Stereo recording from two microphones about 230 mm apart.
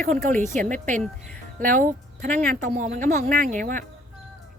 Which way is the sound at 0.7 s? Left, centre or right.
Right.